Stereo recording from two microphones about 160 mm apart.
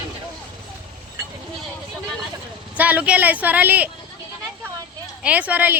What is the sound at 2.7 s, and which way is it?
Speech, 10° right (ahead or behind).